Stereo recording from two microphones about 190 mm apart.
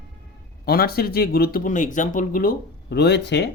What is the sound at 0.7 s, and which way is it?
Speech, 55° left (ahead or behind).